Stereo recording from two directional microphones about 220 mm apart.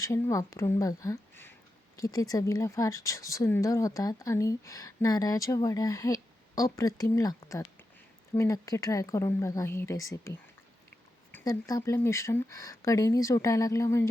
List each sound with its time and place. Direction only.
0.0 s speech: 15° left (ahead or behind)
11.3 s speech: 10° left (ahead or behind)